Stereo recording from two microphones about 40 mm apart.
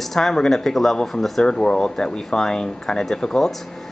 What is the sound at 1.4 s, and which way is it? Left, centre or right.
Speech, centre.